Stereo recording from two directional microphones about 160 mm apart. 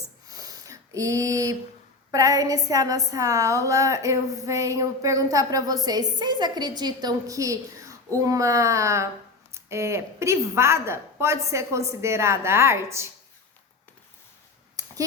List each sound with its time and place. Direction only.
0.3 s a sound: 20° right (ahead or behind)
2.0 s a woman's voice: 20° right (ahead or behind)
14.8 s finger snapping: 25° right (ahead or behind)